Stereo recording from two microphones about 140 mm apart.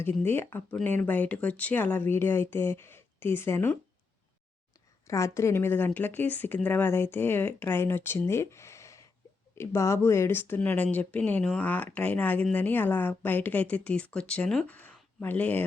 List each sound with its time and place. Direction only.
0.0 s speech: 15° left (ahead or behind)
5.0 s speech: 20° left (ahead or behind)